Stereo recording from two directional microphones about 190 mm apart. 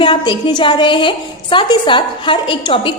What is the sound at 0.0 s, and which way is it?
A woman's voice, 25° left (ahead or behind).